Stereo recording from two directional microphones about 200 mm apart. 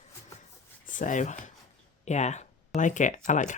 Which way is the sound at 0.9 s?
40° left (ahead or behind).